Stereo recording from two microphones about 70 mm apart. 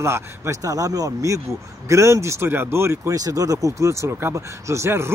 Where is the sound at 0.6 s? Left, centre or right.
Right.